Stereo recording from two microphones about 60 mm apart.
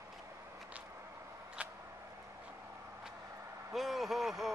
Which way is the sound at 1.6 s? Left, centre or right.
Right.